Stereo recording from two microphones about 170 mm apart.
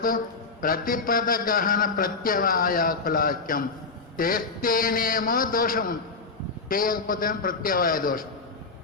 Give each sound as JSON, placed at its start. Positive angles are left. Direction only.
{"t": 0.6, "sound": "a man's voice", "side_deg": 55}